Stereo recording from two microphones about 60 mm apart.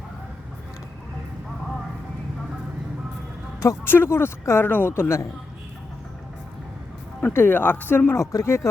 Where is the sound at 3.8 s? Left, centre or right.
Left.